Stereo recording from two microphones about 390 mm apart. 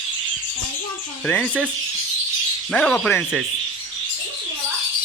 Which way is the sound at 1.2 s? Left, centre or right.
Centre.